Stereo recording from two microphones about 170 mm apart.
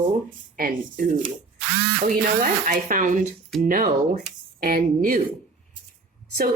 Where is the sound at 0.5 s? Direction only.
55° right (ahead or behind).